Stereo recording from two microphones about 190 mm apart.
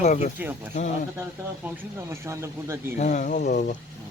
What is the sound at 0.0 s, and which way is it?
Speech, 40° left (ahead or behind).